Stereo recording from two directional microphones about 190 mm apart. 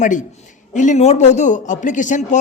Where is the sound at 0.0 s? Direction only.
40° left (ahead or behind).